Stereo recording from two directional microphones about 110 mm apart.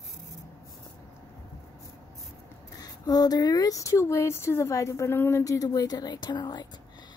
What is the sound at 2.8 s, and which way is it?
Speech, 35° left (ahead or behind).